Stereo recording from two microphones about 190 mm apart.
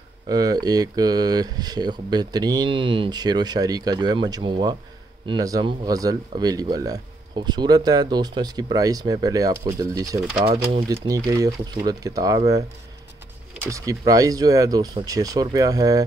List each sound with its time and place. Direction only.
0.3 s speech: 20° right (ahead or behind)
10.4 s speech: 30° right (ahead or behind)
10.9 s speech: 20° right (ahead or behind)
13.7 s speech: 15° right (ahead or behind)